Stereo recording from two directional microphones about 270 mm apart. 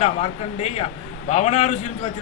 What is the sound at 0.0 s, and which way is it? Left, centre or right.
A man's voice, left.